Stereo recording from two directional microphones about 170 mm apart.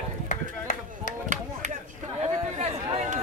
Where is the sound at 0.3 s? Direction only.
50° left (ahead or behind).